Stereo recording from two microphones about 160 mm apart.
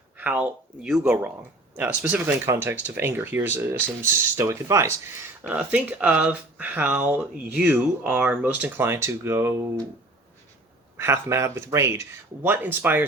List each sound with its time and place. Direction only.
0.2 s speech: 10° right (ahead or behind)
10.9 s speech: 15° right (ahead or behind)